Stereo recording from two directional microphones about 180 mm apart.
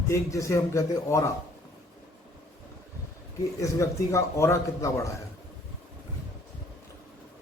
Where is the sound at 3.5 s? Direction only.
15° left (ahead or behind).